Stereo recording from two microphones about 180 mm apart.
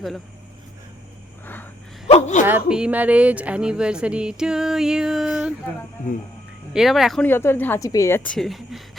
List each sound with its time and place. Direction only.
2.0 s speech: 40° left (ahead or behind)
2.5 s speech: 5° right (ahead or behind)
6.7 s speech: centre (ahead or behind)
7.3 s a woman's voice: 10° left (ahead or behind)